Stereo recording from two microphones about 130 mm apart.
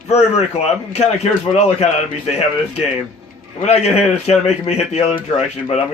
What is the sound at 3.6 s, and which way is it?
Speech, 55° left (ahead or behind).